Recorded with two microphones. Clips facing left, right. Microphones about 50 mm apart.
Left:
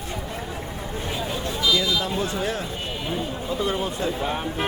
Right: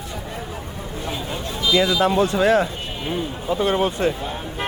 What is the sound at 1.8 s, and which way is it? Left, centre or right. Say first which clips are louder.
Speech: right 7 dB; right.